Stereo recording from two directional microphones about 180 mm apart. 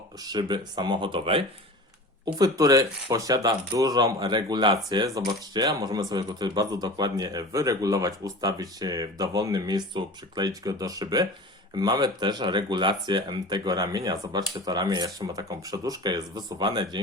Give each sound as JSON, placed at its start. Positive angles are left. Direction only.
{"t": 0.2, "sound": "speech", "side_deg": -20}